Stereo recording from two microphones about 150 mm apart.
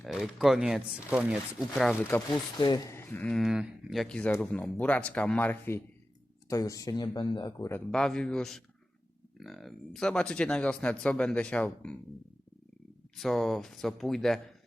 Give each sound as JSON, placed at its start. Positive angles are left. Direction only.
{"t": 0.0, "sound": "speech", "side_deg": 0}
{"t": 2.3, "sound": "speech", "side_deg": 25}
{"t": 7.9, "sound": "speech", "side_deg": 5}
{"t": 13.1, "sound": "speech", "side_deg": 0}